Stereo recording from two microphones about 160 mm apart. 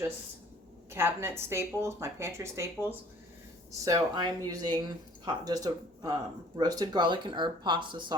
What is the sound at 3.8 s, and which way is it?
Speech, 25° right (ahead or behind).